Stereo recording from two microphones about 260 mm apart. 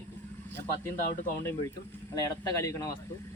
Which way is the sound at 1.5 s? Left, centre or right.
Centre.